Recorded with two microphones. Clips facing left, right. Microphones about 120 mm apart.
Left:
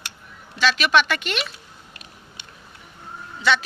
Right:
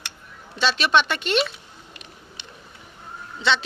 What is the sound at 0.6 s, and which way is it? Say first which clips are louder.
Speech: left 1 dB; 30° right (ahead or behind).